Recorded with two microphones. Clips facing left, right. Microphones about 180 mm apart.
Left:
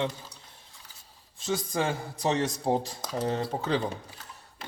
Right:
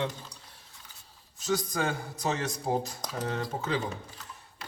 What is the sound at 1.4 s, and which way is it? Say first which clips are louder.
Speech: even; 30° left (ahead or behind).